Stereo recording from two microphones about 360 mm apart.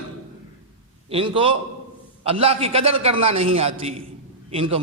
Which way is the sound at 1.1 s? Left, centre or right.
Centre.